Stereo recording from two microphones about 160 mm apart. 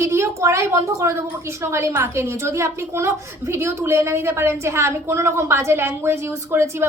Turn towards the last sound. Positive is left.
turn(degrees=-15)  # may be behind; listen again after turning